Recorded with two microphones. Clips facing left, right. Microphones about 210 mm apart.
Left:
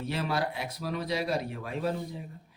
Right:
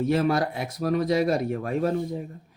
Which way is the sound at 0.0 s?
45° right (ahead or behind).